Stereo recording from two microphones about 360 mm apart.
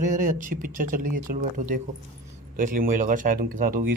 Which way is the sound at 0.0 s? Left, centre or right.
Right.